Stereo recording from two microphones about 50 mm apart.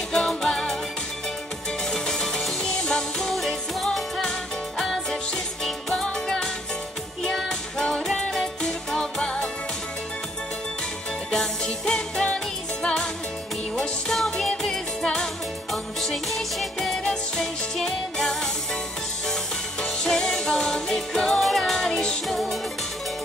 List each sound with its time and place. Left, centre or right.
0.1 s music: centre
1.9 s music: centre
11.3 s music: centre
19.8 s music: centre